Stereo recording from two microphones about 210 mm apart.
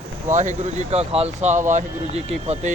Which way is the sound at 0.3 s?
35° right (ahead or behind).